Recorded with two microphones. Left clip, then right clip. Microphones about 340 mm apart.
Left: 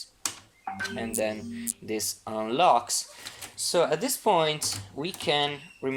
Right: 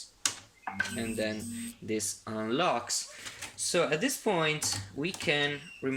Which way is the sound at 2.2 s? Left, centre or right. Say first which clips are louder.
Left 3 dB; left.